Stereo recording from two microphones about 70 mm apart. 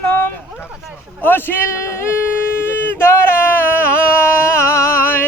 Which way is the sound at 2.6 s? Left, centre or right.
Left.